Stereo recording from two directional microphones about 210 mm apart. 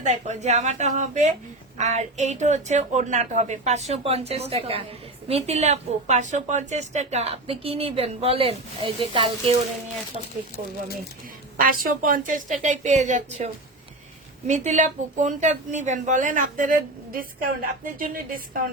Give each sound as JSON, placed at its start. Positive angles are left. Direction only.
{"t": 0.0, "sound": "a woman's voice", "side_deg": -35}
{"t": 11.5, "sound": "a woman's voice", "side_deg": -40}